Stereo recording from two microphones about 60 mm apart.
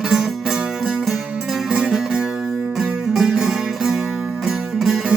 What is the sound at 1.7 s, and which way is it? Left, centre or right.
Music, centre.